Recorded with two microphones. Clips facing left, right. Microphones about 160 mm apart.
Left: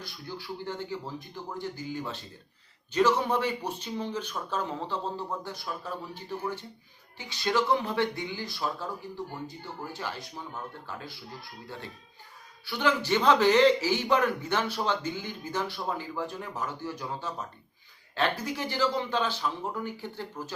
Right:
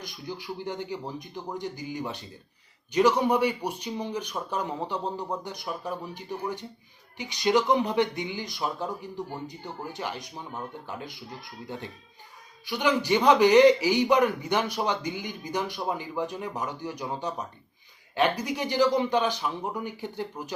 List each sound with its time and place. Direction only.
0.0 s a man's voice: 15° right (ahead or behind)
12.6 s a man's voice: 15° right (ahead or behind)